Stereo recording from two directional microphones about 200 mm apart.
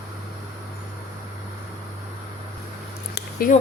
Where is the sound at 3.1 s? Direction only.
45° left (ahead or behind).